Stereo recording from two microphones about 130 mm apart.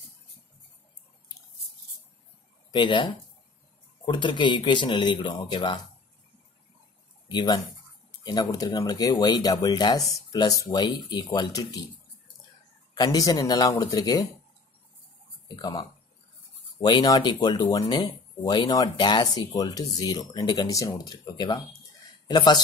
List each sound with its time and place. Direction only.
2.7 s speech: 35° left (ahead or behind)
7.2 s speech: 35° left (ahead or behind)
12.9 s speech: 30° left (ahead or behind)
15.4 s speech: 30° left (ahead or behind)